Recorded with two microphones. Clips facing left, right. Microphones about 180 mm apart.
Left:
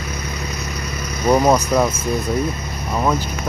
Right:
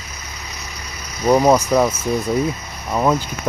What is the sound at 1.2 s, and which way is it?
Speech, 5° right (ahead or behind).